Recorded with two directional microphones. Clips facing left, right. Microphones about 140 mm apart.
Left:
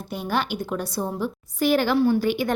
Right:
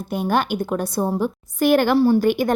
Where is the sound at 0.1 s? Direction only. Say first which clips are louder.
Right 5 dB; 50° right (ahead or behind).